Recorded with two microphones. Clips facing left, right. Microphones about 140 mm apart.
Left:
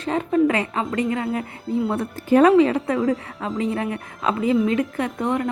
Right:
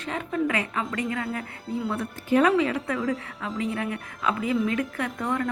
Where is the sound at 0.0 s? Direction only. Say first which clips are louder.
Left 8 dB; 35° left (ahead or behind).